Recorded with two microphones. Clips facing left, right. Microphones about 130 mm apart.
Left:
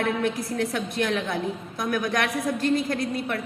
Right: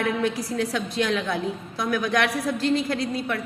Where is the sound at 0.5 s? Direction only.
20° right (ahead or behind).